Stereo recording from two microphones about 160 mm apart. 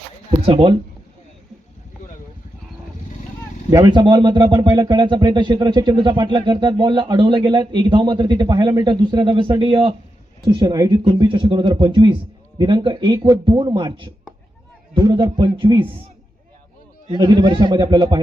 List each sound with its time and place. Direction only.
0.4 s speech: 30° right (ahead or behind)
3.7 s speech: 25° right (ahead or behind)
17.1 s speech: 25° right (ahead or behind)